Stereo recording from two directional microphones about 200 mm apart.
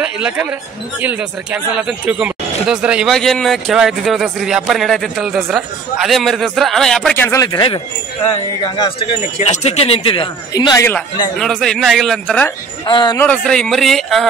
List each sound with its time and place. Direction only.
0.0 s speech: 5° right (ahead or behind)
7.2 s speech: 20° left (ahead or behind)
9.4 s speech: 35° left (ahead or behind); by 11.1 s 10° left (ahead or behind)
11.3 s speech: centre (ahead or behind)
12.8 s speech: 20° left (ahead or behind)
13.2 s speech: 5° left (ahead or behind)